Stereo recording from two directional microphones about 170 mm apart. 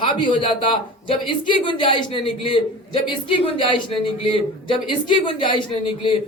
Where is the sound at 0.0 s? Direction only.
30° left (ahead or behind).